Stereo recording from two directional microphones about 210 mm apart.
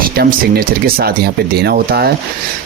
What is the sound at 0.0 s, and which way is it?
Speech, 45° right (ahead or behind).